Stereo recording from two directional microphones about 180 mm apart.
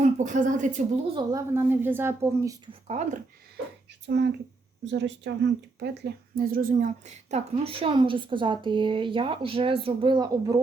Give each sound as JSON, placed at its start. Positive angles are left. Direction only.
{"t": 0.2, "sound": "a woman's voice", "side_deg": -45}
{"t": 1.1, "sound": "a woman's voice", "side_deg": -20}
{"t": 2.8, "sound": "speech", "side_deg": -40}
{"t": 4.0, "sound": "speech", "side_deg": -70}
{"t": 6.3, "sound": "a woman's voice", "side_deg": -50}